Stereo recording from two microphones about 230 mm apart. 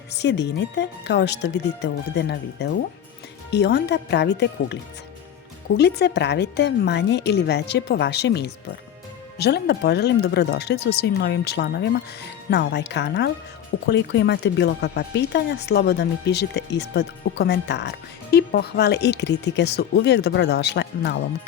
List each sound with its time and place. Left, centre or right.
0.1 s speech: left